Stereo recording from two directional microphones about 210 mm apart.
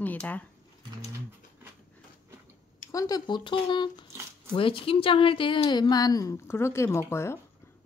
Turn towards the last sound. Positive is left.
turn(degrees=10)  # may be behind; listen again after turning